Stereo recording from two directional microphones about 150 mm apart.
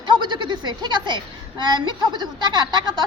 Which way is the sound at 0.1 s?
30° right (ahead or behind).